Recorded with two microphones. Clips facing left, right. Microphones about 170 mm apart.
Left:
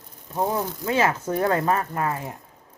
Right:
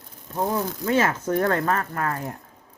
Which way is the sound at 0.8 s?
10° left (ahead or behind).